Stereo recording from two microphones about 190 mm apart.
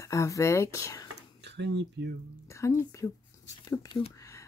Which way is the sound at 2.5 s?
15° left (ahead or behind).